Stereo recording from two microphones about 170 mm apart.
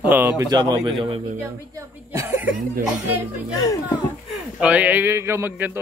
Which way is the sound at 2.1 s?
15° right (ahead or behind).